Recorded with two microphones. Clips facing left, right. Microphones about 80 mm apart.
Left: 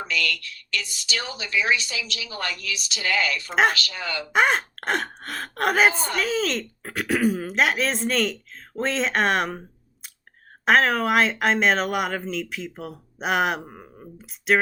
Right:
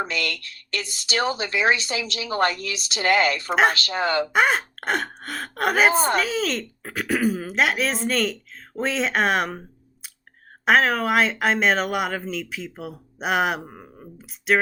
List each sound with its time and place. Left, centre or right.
0.0 s speech: right
3.5 s speech: centre
3.8 s speech: right
4.3 s speech: centre
5.9 s a woman's voice: right
6.1 s speech: centre